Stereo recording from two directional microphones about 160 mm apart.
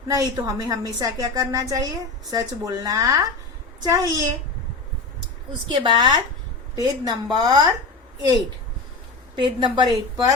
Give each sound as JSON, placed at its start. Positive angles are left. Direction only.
{"t": 0.1, "sound": "a woman's voice", "side_deg": -20}
{"t": 5.6, "sound": "a woman's voice", "side_deg": -30}
{"t": 9.4, "sound": "a woman's voice", "side_deg": -30}